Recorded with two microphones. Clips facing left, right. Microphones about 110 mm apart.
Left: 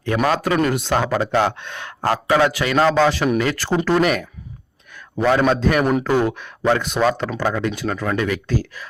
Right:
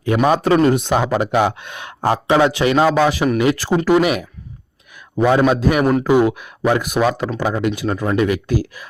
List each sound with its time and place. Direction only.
0.0 s speech: 15° right (ahead or behind)
0.4 s speech: 30° right (ahead or behind)
2.8 s speech: 10° right (ahead or behind)
7.1 s speech: centre (ahead or behind)
7.3 s speech: 15° right (ahead or behind)